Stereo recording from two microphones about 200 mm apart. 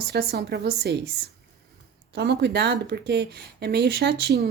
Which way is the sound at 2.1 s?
55° right (ahead or behind).